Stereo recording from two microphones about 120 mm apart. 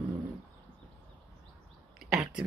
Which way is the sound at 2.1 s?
5° right (ahead or behind).